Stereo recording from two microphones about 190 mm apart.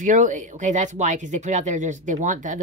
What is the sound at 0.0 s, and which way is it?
Speech, 40° right (ahead or behind).